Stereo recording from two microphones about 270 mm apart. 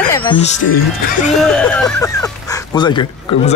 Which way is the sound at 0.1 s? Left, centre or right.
Centre.